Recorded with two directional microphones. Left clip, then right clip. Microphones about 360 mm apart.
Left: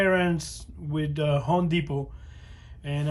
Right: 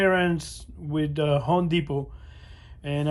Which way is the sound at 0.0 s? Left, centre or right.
Centre.